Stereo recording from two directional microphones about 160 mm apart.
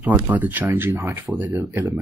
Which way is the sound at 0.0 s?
10° right (ahead or behind).